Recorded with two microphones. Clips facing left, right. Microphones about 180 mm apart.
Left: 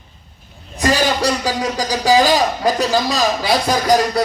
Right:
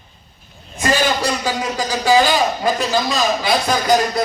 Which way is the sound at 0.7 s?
35° left (ahead or behind).